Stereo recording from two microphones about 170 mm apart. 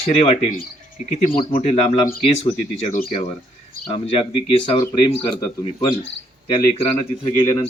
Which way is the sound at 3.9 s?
35° left (ahead or behind).